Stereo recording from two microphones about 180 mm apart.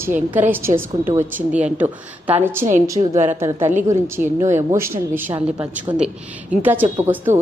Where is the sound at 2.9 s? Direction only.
40° right (ahead or behind).